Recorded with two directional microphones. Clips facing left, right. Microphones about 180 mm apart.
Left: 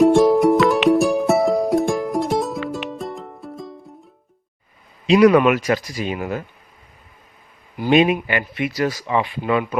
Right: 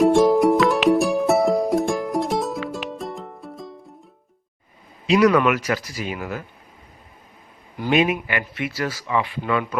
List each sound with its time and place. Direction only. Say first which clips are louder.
0.0 s music: left 2 dB; centre (ahead or behind)
5.0 s speech: left 4 dB; 20° left (ahead or behind)
7.8 s speech: left 4 dB; 25° left (ahead or behind)